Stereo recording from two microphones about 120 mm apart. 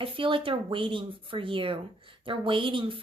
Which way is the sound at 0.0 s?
45° right (ahead or behind).